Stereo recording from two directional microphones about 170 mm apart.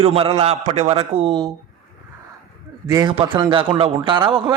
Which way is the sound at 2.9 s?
20° right (ahead or behind).